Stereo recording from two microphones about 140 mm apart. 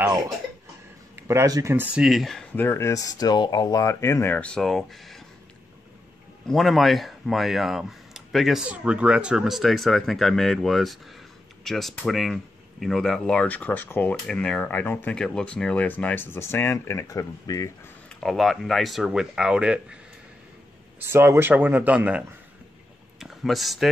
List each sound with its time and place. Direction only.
1.1 s speech: 20° right (ahead or behind)
2.0 s speech: centre (ahead or behind)
2.5 s speech: 15° left (ahead or behind)
6.4 s speech: centre (ahead or behind); by 17.6 s 25° left (ahead or behind)
18.0 s speech: centre (ahead or behind)
21.0 s speech: 15° right (ahead or behind); by 23.9 s centre (ahead or behind)